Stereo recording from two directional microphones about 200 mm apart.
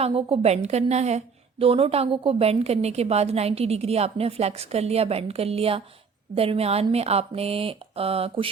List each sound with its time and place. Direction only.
0.0 s a woman's voice: 30° right (ahead or behind)